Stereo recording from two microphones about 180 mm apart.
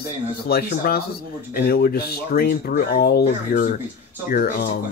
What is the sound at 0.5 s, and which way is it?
Speech, 60° left (ahead or behind).